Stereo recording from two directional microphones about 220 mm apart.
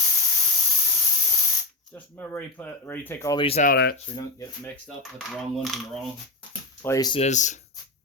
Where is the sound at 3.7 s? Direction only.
45° left (ahead or behind).